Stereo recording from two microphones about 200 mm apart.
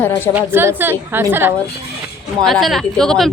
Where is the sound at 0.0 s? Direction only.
10° left (ahead or behind).